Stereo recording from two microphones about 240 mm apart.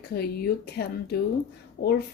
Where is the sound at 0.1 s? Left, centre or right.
Left.